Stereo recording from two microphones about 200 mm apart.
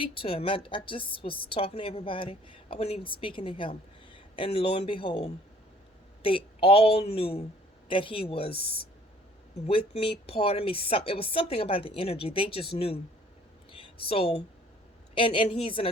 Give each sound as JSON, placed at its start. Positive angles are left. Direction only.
{"t": 0.0, "sound": "a woman's voice", "side_deg": 25}
{"t": 13.7, "sound": "a sound", "side_deg": 25}
{"t": 15.1, "sound": "a woman's voice", "side_deg": 25}